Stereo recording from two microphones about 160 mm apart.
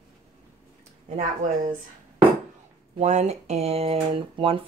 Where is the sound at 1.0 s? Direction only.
50° right (ahead or behind).